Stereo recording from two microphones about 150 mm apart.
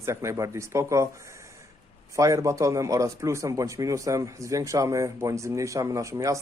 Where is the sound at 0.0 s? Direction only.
20° right (ahead or behind).